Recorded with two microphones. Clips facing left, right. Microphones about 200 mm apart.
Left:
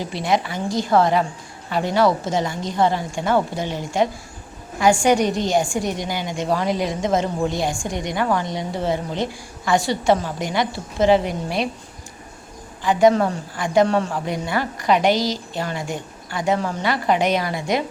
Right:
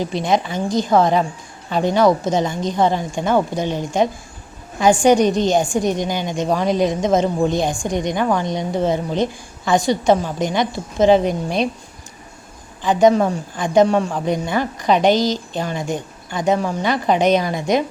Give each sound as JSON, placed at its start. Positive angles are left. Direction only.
{"t": 0.0, "sound": "a woman's voice", "side_deg": -20}
{"t": 12.8, "sound": "a woman's voice", "side_deg": -20}